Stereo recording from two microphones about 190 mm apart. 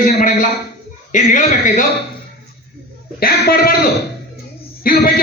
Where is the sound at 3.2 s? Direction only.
55° left (ahead or behind).